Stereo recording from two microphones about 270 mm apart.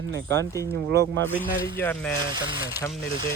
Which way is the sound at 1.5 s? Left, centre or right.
Left.